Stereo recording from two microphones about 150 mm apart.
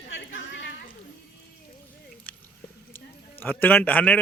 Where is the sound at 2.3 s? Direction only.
10° left (ahead or behind).